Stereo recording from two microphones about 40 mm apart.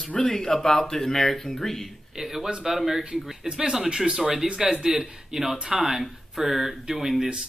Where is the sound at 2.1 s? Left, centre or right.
Centre.